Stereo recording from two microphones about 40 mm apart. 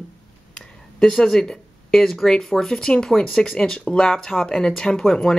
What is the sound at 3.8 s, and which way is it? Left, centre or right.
Speech, left.